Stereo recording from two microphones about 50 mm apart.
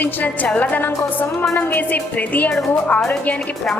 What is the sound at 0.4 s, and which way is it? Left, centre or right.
Speech, left.